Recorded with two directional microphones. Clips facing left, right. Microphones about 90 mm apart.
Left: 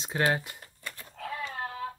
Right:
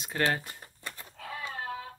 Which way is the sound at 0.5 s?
20° right (ahead or behind).